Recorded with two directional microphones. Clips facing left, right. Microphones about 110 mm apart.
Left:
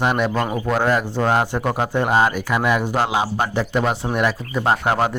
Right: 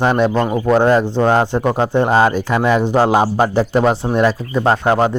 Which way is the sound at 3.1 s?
40° right (ahead or behind).